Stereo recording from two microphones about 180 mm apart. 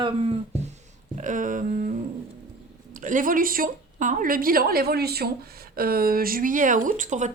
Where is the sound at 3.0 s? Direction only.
45° right (ahead or behind).